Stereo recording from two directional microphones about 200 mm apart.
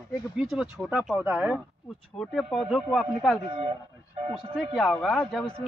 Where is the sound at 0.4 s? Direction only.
Centre (ahead or behind).